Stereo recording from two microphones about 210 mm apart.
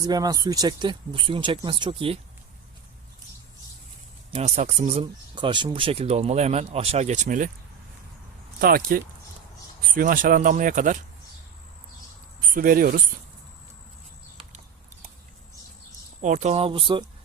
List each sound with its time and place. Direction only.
0.0 s speech: 20° right (ahead or behind)
4.3 s speech: 30° right (ahead or behind)
8.6 s speech: 45° right (ahead or behind)
12.5 s speech: 40° right (ahead or behind)
16.2 s speech: 35° right (ahead or behind)